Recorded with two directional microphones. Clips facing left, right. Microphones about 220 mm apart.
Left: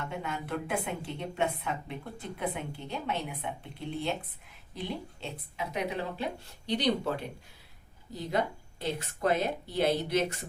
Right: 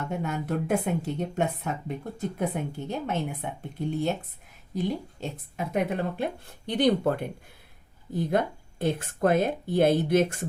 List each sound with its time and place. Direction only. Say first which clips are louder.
0.1 s a woman's voice: right 6 dB; 45° right (ahead or behind)